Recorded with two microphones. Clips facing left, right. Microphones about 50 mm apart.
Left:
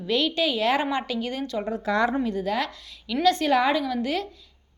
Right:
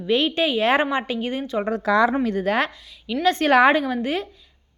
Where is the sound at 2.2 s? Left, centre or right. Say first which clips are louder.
Right 5 dB; right.